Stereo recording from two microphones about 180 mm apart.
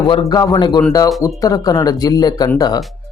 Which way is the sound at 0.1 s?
25° left (ahead or behind).